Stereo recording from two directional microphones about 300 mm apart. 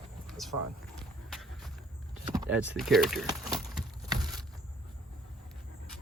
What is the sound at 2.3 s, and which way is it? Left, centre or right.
Speech, centre.